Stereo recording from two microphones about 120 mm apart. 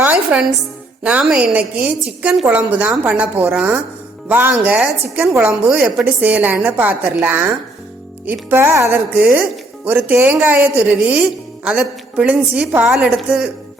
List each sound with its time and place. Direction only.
0.0 s music: 10° right (ahead or behind)
1.0 s speech: 10° right (ahead or behind)